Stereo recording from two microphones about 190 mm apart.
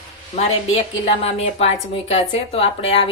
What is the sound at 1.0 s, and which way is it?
A woman's voice, 30° left (ahead or behind).